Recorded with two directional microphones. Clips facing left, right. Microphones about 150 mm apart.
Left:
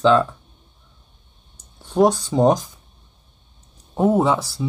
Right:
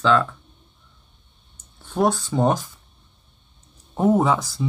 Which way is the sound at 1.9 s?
15° left (ahead or behind).